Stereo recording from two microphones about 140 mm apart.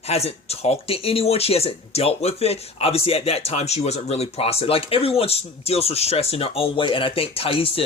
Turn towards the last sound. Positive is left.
turn(degrees=40)  # may be behind; listen again after turning